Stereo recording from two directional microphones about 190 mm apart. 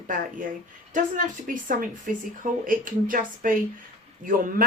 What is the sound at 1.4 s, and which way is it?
Speech, 45° right (ahead or behind).